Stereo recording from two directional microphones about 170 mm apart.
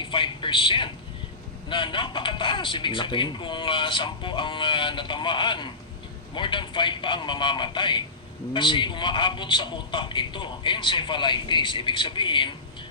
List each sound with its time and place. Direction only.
0.0 s speech: 30° left (ahead or behind)